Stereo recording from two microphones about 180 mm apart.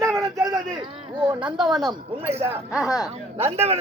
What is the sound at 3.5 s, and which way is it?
Speech, 35° right (ahead or behind).